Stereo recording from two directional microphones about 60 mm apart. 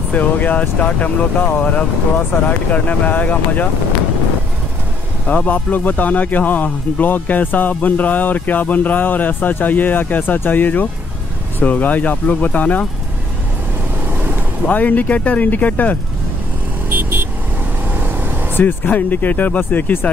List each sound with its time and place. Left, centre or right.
0.1 s a man's voice: left
5.3 s a man's voice: left
14.7 s a man's voice: left
16.9 s vehicle: right
18.5 s a man's voice: left